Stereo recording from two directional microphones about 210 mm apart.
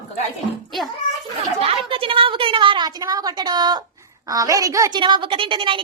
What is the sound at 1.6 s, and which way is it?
A woman's voice, 25° right (ahead or behind).